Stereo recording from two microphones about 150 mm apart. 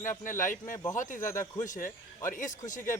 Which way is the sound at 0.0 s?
60° left (ahead or behind).